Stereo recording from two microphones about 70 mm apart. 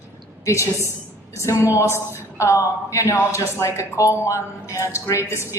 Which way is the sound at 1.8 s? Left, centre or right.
Left.